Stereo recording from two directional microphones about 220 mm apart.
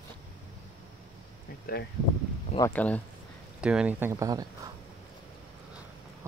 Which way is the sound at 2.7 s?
5° left (ahead or behind).